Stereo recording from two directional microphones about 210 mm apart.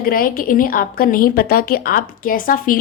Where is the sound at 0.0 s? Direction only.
45° left (ahead or behind).